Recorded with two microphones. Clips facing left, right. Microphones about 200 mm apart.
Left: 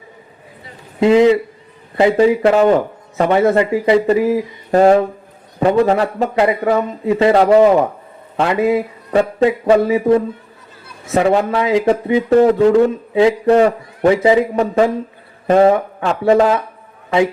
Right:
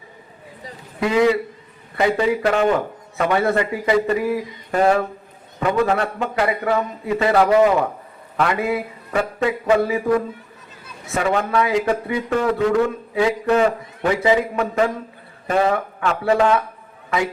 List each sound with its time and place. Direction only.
0.9 s a man's voice: 25° left (ahead or behind)
11.1 s a man's voice: 35° left (ahead or behind)